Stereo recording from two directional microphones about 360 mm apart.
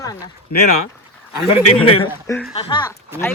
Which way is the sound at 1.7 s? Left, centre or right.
Centre.